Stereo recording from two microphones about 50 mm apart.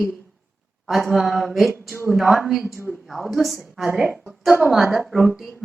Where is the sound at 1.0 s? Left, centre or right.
Centre.